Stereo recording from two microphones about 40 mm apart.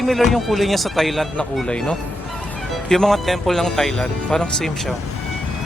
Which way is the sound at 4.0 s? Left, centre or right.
Left.